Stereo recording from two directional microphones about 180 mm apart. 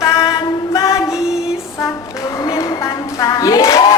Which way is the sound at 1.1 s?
5° right (ahead or behind).